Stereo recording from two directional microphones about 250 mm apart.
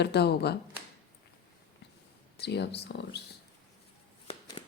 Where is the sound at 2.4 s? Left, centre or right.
Left.